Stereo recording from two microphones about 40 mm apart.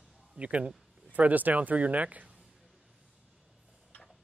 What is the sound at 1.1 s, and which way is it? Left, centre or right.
Speech, right.